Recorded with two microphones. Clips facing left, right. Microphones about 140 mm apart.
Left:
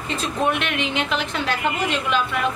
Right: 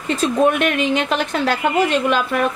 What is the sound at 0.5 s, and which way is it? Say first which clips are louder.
Speech: right 6 dB; 45° right (ahead or behind).